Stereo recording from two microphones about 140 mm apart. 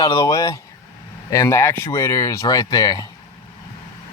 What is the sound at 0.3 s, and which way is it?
Speech, 25° left (ahead or behind).